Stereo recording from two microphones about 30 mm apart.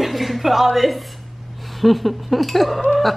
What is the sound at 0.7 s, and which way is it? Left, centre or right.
A woman's voice, centre.